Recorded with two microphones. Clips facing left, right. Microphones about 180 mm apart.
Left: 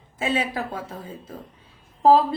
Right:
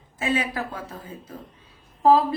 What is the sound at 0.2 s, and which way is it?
Speech, 25° left (ahead or behind).